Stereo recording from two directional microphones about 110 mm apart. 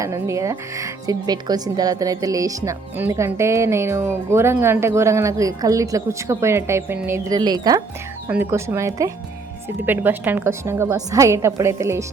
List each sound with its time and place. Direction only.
0.0 s speech: 25° right (ahead or behind)
7.3 s speech: 40° right (ahead or behind)
8.3 s speech: 20° right (ahead or behind)